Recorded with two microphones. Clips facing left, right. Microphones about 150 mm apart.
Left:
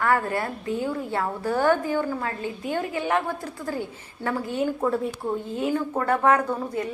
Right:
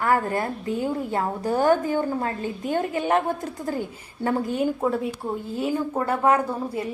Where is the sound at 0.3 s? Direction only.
25° right (ahead or behind).